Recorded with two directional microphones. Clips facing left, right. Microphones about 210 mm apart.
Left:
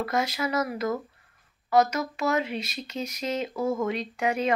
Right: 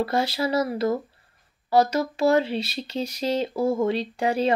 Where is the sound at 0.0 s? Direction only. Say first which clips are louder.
Right 4 dB; 30° right (ahead or behind).